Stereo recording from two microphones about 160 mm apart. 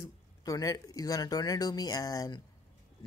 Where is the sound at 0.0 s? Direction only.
20° left (ahead or behind).